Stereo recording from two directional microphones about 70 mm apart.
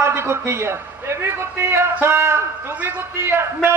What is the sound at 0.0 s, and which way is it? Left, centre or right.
A man's voice, right.